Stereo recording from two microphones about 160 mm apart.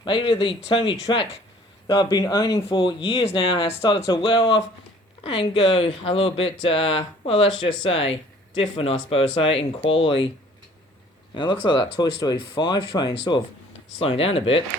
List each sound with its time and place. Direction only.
0.0 s speech: 35° left (ahead or behind)
2.6 s speech: 35° left (ahead or behind)
11.6 s speech: 25° left (ahead or behind)
14.0 s speech: 35° left (ahead or behind)